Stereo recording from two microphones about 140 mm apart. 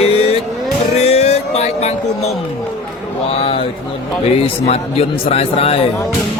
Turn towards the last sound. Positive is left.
turn(degrees=45)  # may be behind; listen again after turning